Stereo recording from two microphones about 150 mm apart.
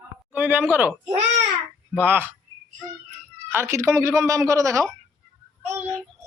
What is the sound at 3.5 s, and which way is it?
A woman's voice, 15° right (ahead or behind).